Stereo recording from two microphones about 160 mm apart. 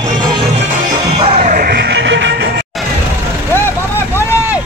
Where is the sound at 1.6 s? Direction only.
90° right.